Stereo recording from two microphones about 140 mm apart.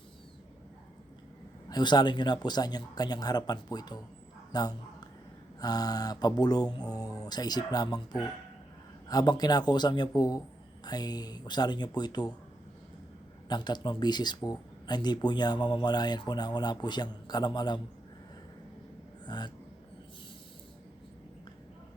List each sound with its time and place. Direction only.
1.7 s speech: 30° left (ahead or behind)
13.5 s speech: 30° left (ahead or behind)
19.2 s speech: 30° left (ahead or behind)